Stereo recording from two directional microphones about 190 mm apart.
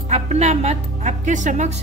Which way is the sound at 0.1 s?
35° right (ahead or behind).